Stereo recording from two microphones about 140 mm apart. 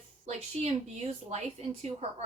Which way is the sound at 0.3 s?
50° right (ahead or behind).